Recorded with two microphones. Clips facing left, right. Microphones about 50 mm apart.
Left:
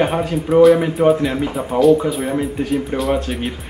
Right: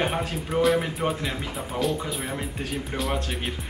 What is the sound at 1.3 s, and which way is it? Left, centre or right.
Speech, left.